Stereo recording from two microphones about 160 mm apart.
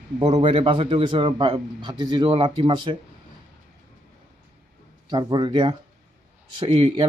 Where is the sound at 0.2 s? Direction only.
40° right (ahead or behind).